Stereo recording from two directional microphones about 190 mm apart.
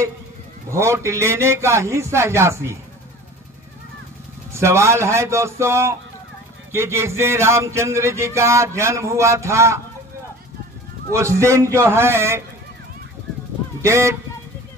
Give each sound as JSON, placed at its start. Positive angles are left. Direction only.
{"t": 0.7, "sound": "a man's voice", "side_deg": -15}
{"t": 4.5, "sound": "a man's voice", "side_deg": -15}
{"t": 11.1, "sound": "a man's voice", "side_deg": -15}
{"t": 13.8, "sound": "a man's voice", "side_deg": -15}